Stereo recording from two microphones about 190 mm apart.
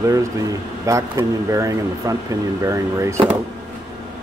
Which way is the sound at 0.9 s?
15° right (ahead or behind).